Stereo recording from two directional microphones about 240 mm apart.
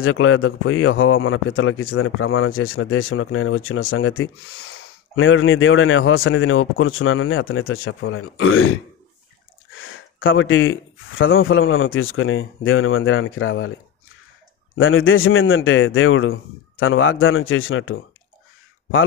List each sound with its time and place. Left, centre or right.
0.0 s speech: left
5.1 s speech: left
9.8 s speech: left
14.8 s speech: left